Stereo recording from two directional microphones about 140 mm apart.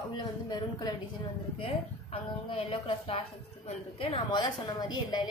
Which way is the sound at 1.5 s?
40° left (ahead or behind).